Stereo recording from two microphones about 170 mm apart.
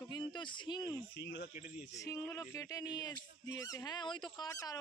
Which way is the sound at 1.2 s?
80° left.